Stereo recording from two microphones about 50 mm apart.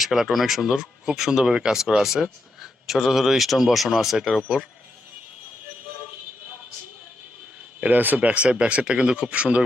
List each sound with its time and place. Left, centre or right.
0.0 s speech: centre
7.9 s speech: right